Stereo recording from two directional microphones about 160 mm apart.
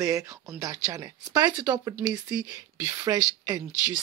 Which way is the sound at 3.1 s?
20° right (ahead or behind).